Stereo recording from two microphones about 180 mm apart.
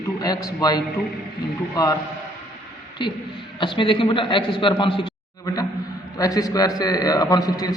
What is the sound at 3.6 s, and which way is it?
Speech, 25° left (ahead or behind).